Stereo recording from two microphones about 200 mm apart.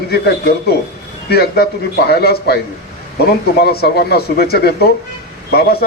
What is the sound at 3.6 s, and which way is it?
Speech, 55° left (ahead or behind).